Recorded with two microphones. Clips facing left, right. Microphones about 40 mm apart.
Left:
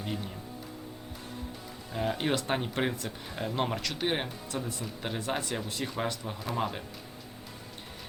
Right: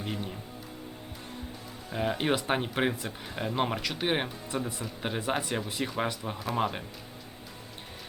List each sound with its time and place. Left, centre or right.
1.9 s speech: centre